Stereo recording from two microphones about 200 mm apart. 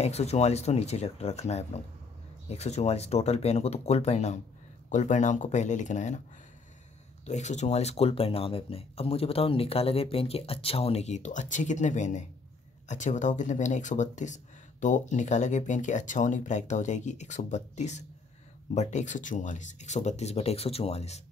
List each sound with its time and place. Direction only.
0.0 s speech: 30° left (ahead or behind)
7.2 s speech: 35° left (ahead or behind)